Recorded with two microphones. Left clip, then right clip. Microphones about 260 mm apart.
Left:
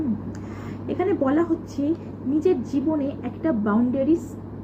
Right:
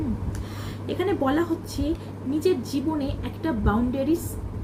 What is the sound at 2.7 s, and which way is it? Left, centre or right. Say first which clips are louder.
A woman's voice: left 3 dB; right.